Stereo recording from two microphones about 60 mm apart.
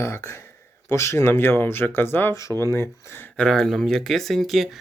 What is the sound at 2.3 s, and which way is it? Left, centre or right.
Speech, left.